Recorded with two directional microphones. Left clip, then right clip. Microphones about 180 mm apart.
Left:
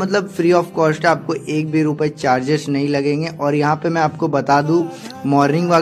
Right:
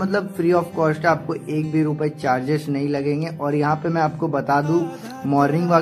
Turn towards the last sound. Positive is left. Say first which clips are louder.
# left 3 dB
turn(degrees=30)  # may be behind; listen again after turning